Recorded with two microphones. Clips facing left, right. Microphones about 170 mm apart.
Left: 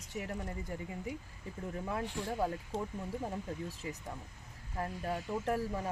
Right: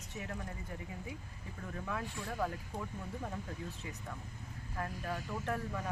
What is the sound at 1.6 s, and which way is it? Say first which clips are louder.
Speech: left 3 dB; 30° left (ahead or behind).